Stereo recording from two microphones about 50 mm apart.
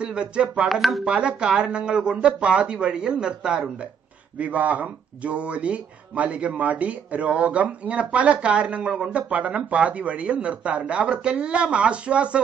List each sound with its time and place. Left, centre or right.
0.0 s speech: centre
0.7 s speech: centre
1.0 s speech: right
4.4 s speech: right